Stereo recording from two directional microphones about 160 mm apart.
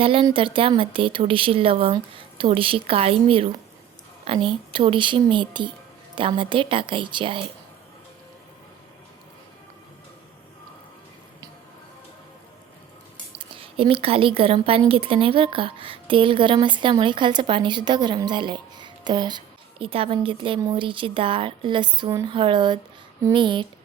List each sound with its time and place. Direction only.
0.0 s a woman's voice: 35° right (ahead or behind)
13.4 s a woman's voice: 35° right (ahead or behind)